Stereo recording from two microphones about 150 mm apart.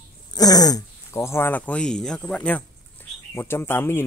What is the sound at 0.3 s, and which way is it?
Speech, 25° left (ahead or behind).